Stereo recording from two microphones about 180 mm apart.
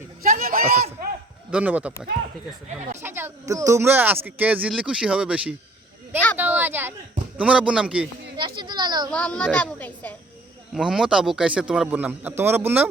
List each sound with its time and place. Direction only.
0.2 s a sound: 55° right (ahead or behind)
1.5 s speech: 5° right (ahead or behind)
3.0 s speech: 10° right (ahead or behind)
8.4 s a sound: 25° right (ahead or behind)
9.0 s a woman's voice: 5° left (ahead or behind)
10.8 s speech: 5° right (ahead or behind)